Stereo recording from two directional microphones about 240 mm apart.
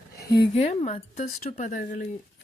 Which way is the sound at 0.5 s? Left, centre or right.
Left.